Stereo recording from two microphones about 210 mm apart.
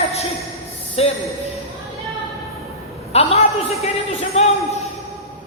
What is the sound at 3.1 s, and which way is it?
Speech, 30° left (ahead or behind).